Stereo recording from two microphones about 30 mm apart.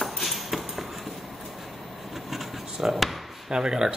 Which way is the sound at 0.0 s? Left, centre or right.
Centre.